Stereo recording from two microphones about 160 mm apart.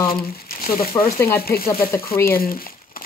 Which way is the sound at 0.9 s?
20° left (ahead or behind).